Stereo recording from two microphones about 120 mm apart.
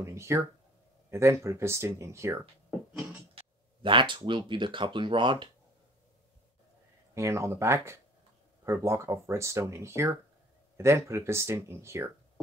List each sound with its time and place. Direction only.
0.0 s speech: 25° right (ahead or behind)
3.8 s speech: 40° right (ahead or behind)
7.2 s speech: 25° right (ahead or behind)